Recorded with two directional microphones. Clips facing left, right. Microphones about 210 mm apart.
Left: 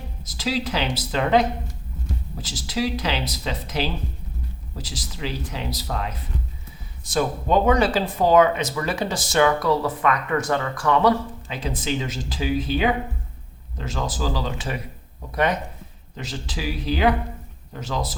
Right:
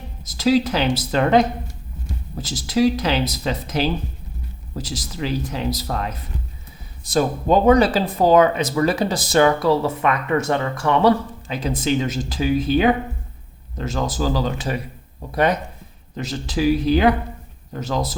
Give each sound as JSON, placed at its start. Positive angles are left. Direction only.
{"t": 0.3, "sound": "speech", "side_deg": -45}
{"t": 11.9, "sound": "speech", "side_deg": -50}
{"t": 16.1, "sound": "speech", "side_deg": -45}